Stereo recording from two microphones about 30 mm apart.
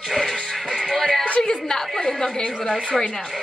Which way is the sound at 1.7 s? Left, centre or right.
Left.